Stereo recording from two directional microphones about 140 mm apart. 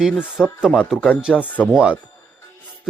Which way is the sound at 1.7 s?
5° right (ahead or behind).